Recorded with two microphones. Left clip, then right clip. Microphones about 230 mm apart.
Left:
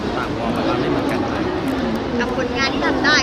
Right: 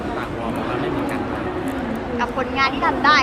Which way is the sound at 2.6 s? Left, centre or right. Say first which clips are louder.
Right 2 dB; right.